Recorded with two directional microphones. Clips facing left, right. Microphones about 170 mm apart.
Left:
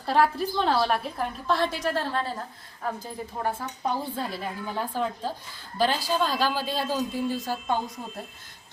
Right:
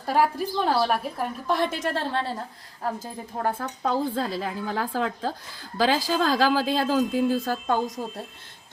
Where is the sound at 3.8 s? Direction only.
90° right.